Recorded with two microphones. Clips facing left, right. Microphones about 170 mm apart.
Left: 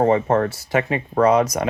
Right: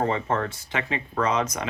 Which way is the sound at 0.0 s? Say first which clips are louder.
Left 8 dB; 40° left (ahead or behind).